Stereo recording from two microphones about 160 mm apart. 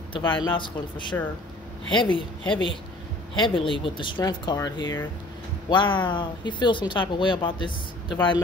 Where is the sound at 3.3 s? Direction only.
30° left (ahead or behind).